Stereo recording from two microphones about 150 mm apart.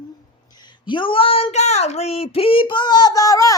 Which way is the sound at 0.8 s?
35° left (ahead or behind).